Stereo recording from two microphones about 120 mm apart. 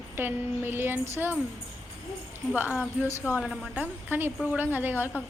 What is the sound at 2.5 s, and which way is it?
Speech, 15° right (ahead or behind).